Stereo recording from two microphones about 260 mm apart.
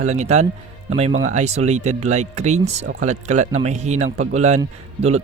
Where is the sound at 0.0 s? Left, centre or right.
Right.